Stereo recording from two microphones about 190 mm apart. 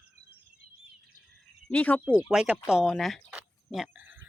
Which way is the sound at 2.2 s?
5° right (ahead or behind).